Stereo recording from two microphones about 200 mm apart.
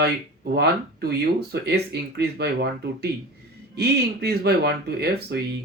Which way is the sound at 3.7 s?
55° right (ahead or behind).